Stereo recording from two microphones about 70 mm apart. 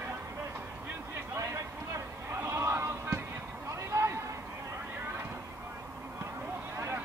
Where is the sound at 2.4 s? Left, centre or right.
Right.